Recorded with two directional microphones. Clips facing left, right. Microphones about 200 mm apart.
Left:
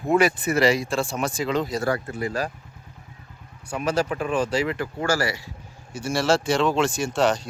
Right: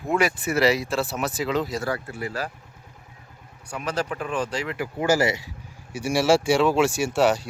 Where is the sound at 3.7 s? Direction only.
10° left (ahead or behind).